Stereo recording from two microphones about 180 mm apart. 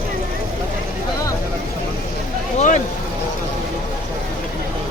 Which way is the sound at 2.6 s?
45° left (ahead or behind).